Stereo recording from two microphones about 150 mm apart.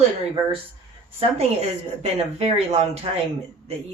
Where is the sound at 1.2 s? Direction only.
45° right (ahead or behind).